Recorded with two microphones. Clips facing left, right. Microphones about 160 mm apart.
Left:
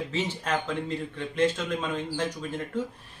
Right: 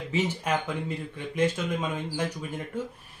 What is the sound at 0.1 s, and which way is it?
Speech, 10° right (ahead or behind).